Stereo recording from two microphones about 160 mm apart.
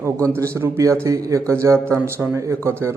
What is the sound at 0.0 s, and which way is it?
A man's voice, 20° right (ahead or behind).